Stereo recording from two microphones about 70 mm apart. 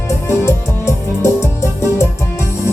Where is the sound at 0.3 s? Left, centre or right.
Left.